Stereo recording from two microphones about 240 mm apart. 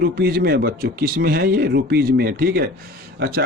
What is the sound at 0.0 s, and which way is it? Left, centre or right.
Speech, right.